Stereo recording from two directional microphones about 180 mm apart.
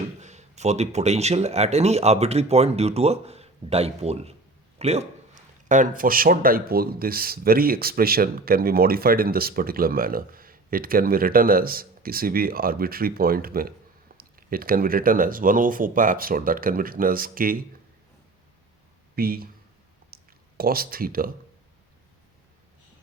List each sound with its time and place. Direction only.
0.2 s a man's voice: 40° right (ahead or behind)
19.1 s a man's voice: 55° right (ahead or behind)
20.1 s a sound: 55° right (ahead or behind)
20.6 s speech: 55° right (ahead or behind)